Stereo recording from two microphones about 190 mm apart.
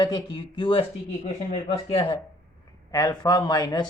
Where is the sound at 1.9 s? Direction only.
30° left (ahead or behind).